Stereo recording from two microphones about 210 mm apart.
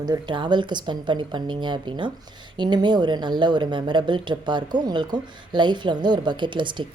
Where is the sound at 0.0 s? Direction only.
20° right (ahead or behind).